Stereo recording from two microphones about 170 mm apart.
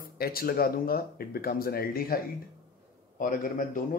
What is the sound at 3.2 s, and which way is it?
Speech, 55° left (ahead or behind).